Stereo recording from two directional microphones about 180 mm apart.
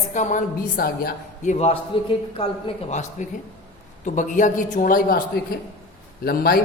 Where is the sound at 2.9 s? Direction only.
40° left (ahead or behind); by 6.6 s 60° left (ahead or behind).